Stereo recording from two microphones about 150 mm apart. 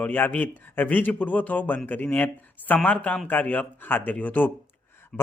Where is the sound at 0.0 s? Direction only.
10° left (ahead or behind).